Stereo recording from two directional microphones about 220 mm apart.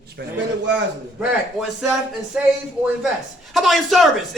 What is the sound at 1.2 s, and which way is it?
Speech, 5° right (ahead or behind).